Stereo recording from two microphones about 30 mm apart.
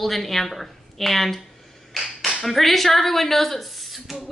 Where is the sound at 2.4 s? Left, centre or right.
Centre.